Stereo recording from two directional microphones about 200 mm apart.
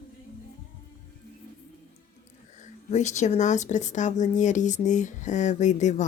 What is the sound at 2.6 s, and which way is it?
A woman's voice, 35° left (ahead or behind).